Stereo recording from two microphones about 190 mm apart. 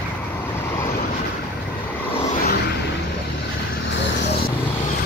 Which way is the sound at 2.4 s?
55° left (ahead or behind).